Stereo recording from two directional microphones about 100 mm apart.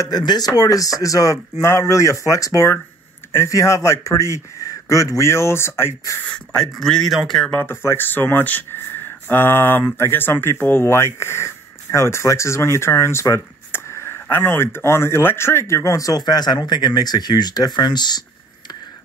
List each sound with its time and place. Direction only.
0.0 s speech: 45° left (ahead or behind); by 6.1 s 25° left (ahead or behind)
6.3 s a man's voice: 5° left (ahead or behind)
7.5 s speech: 20° left (ahead or behind); by 18.2 s 45° left (ahead or behind)